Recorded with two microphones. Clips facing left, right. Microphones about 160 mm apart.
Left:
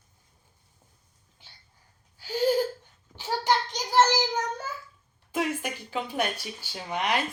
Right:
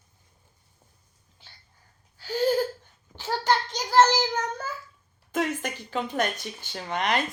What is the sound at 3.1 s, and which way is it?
Child singing, 15° left (ahead or behind).